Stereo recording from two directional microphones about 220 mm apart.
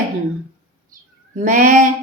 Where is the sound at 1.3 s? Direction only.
35° right (ahead or behind).